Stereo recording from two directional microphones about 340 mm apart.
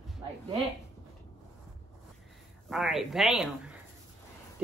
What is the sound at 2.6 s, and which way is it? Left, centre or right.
Speech, centre.